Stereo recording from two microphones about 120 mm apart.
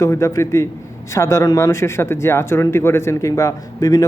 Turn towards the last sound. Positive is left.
turn(degrees=30)  # may be behind; listen again after turning